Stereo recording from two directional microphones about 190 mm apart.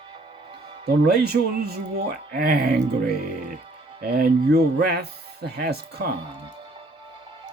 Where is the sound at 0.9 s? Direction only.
55° right (ahead or behind).